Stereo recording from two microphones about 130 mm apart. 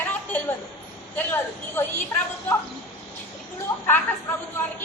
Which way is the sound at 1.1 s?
15° left (ahead or behind).